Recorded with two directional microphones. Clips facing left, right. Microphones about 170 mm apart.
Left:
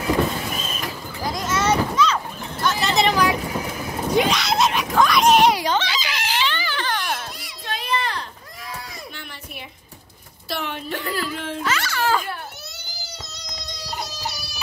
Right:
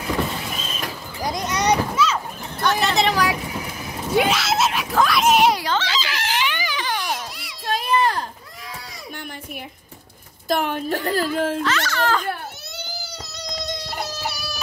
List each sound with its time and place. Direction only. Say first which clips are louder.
1.2 s a sound: even; 20° right (ahead or behind)
2.6 s vehicle: right 1 dB; centre (ahead or behind)
4.1 s screaming: right 1 dB; 5° right (ahead or behind)
5.6 s chicken: left 1 dB; 15° left (ahead or behind)
6.4 s a sound: even; 10° right (ahead or behind)
7.6 s children playing: right 6 dB; 45° right (ahead or behind)
10.5 s a sound: right 6 dB; 45° right (ahead or behind)
11.6 s children playing: right 1 dB; 10° left (ahead or behind)
12.3 s baby cry: right 4 dB; 60° right (ahead or behind)